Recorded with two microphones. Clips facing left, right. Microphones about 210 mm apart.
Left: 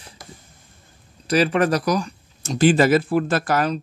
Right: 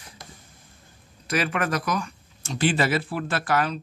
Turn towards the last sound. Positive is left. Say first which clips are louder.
# left 4 dB
turn(degrees=40)  # may be behind; listen again after turning